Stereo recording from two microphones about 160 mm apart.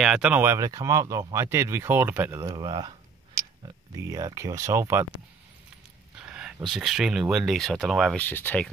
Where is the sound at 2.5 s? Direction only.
25° right (ahead or behind).